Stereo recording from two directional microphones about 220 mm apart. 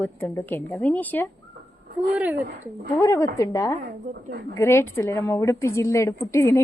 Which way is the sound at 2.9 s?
15° left (ahead or behind).